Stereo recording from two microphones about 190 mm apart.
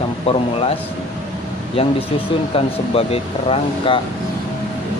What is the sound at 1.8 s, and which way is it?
Speech, 30° left (ahead or behind).